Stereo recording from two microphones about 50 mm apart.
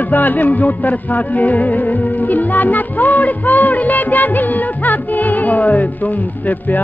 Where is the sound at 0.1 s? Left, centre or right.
Left.